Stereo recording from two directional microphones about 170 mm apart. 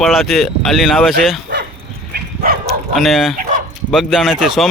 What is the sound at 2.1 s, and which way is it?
Dog, 60° right (ahead or behind).